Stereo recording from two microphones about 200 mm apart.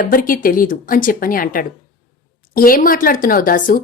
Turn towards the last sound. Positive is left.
turn(degrees=45)  # may be behind; listen again after turning